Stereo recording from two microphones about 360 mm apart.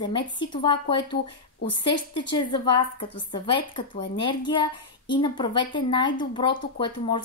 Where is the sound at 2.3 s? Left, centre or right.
Centre.